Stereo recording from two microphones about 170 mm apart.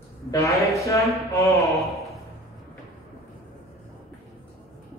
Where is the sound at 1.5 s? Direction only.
Centre (ahead or behind).